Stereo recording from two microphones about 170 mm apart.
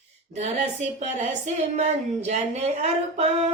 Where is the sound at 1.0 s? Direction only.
40° right (ahead or behind).